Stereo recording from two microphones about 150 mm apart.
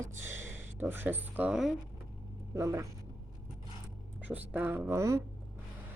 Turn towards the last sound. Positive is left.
turn(degrees=-20)  # may be behind; listen again after turning